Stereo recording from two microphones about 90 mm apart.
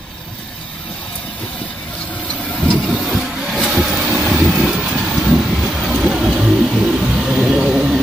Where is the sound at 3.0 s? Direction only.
5° right (ahead or behind).